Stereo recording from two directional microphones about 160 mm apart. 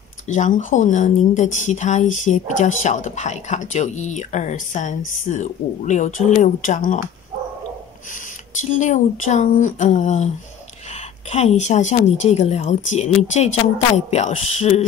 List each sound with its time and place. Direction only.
0.3 s speech: 50° left (ahead or behind)
8.1 s speech: 50° left (ahead or behind)